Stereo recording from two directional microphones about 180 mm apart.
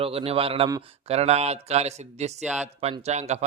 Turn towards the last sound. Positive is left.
turn(degrees=-40)  # may be behind; listen again after turning